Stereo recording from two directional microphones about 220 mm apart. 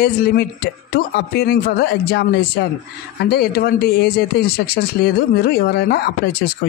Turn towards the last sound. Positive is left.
turn(degrees=45)  # may be behind; listen again after turning